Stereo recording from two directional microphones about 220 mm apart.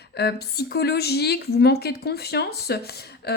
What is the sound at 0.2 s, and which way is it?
Speech, 45° left (ahead or behind).